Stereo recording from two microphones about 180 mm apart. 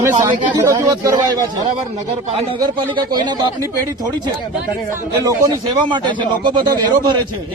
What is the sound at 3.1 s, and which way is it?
Speech, 25° right (ahead or behind).